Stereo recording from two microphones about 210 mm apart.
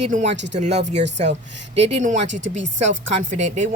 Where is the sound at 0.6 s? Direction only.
30° right (ahead or behind).